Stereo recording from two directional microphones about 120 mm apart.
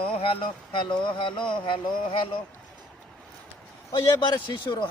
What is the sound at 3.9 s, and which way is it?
A man's voice, 40° left (ahead or behind).